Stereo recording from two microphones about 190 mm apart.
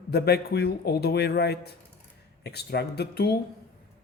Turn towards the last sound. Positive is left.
turn(degrees=60)  # may be behind; listen again after turning